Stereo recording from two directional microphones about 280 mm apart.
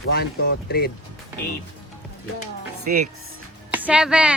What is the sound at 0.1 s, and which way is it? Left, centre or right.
Speech, left.